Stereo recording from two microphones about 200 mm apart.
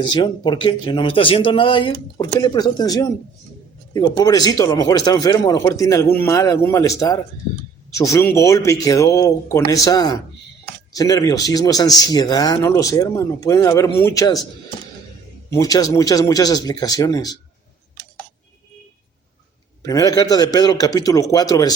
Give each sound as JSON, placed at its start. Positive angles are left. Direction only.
{"t": 0.0, "sound": "speech", "side_deg": 20}
{"t": 15.5, "sound": "speech", "side_deg": 20}
{"t": 19.8, "sound": "speech", "side_deg": 15}